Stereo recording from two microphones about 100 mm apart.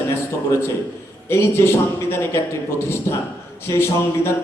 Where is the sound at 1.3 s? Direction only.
25° left (ahead or behind).